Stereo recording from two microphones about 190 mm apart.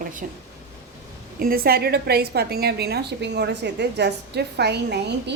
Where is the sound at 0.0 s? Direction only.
45° right (ahead or behind).